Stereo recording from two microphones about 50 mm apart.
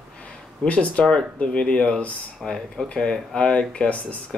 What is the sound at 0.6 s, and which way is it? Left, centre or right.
Speech, left.